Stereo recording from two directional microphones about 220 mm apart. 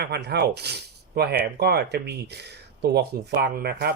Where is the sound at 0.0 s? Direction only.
50° right (ahead or behind).